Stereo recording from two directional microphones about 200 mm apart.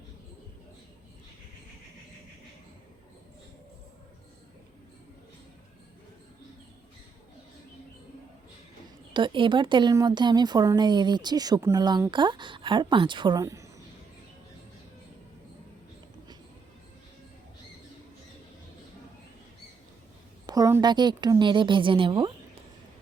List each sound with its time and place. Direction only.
9.1 s speech: 25° right (ahead or behind)
20.5 s speech: 15° right (ahead or behind)